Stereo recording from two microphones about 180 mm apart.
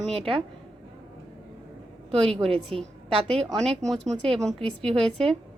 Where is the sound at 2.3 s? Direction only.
35° right (ahead or behind).